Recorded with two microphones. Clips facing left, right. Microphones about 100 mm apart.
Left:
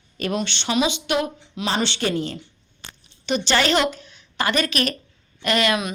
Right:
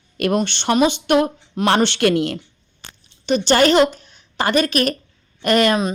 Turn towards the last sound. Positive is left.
turn(degrees=-45)  # may be behind; listen again after turning